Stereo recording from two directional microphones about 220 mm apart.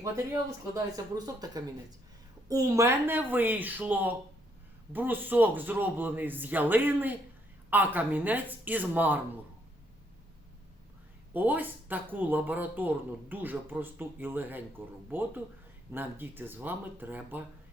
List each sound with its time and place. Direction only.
0.7 s speech: 15° right (ahead or behind)
11.3 s speech: 10° right (ahead or behind)